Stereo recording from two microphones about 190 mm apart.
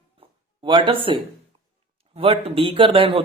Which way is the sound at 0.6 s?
25° right (ahead or behind).